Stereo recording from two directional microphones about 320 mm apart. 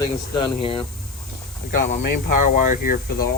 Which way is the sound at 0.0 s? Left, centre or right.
Centre.